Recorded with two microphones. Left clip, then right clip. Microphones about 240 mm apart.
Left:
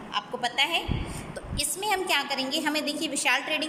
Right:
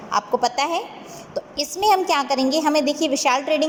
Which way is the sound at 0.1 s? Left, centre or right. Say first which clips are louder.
Right 10 dB; centre.